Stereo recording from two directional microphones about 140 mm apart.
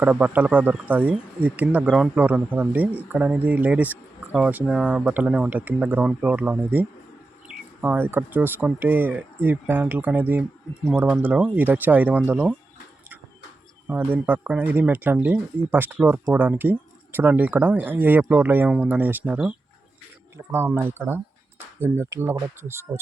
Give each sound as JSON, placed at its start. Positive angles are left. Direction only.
{"t": 0.0, "sound": "speech", "side_deg": -10}
{"t": 13.8, "sound": "speech", "side_deg": -10}